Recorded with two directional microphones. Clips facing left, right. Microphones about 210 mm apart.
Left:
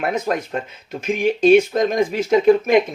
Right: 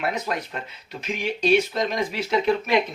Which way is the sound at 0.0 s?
50° left (ahead or behind).